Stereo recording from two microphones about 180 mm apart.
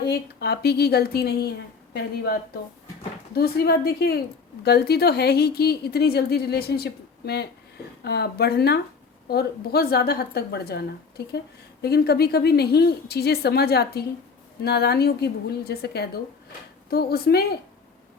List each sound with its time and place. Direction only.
0.1 s speech: 60° left (ahead or behind)